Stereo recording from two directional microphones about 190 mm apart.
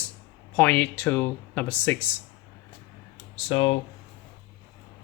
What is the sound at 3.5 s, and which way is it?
Speech, 30° left (ahead or behind).